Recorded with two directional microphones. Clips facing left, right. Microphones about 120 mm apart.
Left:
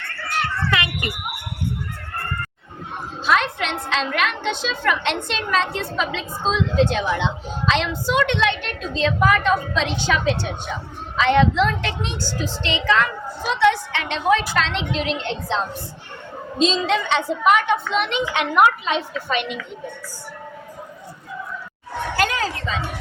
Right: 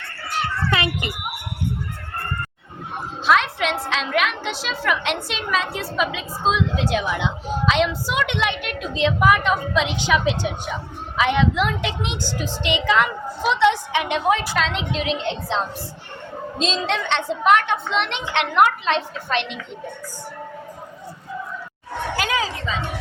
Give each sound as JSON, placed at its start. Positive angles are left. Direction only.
{"t": 0.7, "sound": "children playing", "side_deg": -25}
{"t": 3.2, "sound": "a woman's voice", "side_deg": 0}
{"t": 22.1, "sound": "speech", "side_deg": -5}